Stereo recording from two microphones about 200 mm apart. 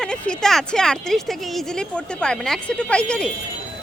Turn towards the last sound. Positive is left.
turn(degrees=5)  # may be behind; listen again after turning